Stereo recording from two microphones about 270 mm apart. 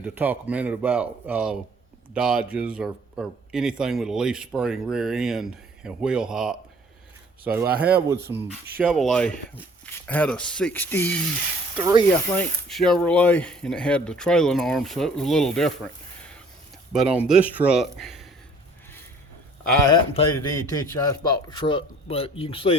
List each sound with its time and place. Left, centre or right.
0.0 s a man's voice: centre
8.8 s a man's voice: centre
11.8 s speech: centre
12.4 s a man's voice: centre
16.9 s a man's voice: centre
19.9 s a man's voice: centre